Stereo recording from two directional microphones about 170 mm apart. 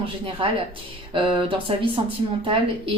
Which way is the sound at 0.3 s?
35° right (ahead or behind).